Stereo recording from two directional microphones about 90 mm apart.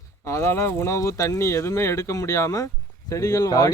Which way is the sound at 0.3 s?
30° left (ahead or behind).